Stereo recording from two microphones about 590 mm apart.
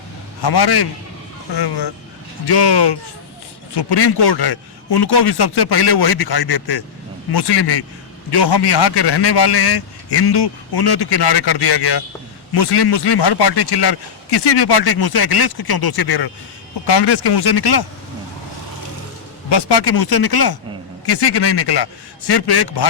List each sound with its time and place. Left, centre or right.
0.4 s speech: left
19.5 s speech: left